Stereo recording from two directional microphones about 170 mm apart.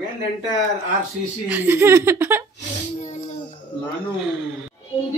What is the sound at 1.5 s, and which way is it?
Speech, 10° right (ahead or behind).